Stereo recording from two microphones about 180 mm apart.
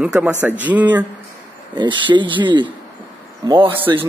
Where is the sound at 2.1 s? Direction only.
25° right (ahead or behind).